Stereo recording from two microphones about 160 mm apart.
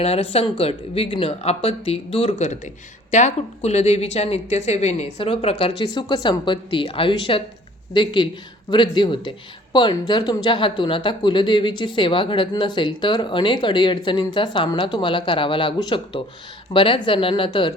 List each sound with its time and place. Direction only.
0.0 s speech: 40° left (ahead or behind)